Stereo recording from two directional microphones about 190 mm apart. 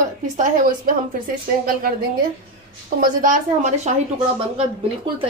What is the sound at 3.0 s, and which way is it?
Speech, 45° right (ahead or behind).